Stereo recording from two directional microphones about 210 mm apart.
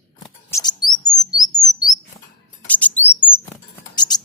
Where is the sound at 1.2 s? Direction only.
20° left (ahead or behind).